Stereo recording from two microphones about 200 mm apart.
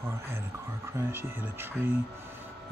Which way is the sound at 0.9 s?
10° right (ahead or behind).